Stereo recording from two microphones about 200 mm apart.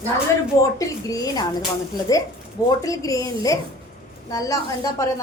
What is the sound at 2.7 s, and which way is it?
A woman's voice, 15° left (ahead or behind).